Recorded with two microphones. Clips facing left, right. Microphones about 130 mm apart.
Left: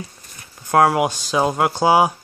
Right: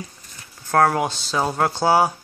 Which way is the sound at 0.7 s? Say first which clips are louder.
Left 3 dB; 10° left (ahead or behind).